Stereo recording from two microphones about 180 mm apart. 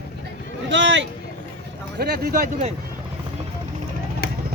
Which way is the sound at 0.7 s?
90° right.